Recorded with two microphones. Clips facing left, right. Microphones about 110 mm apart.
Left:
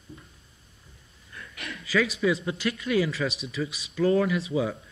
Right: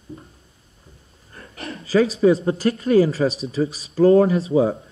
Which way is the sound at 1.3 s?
40° right (ahead or behind).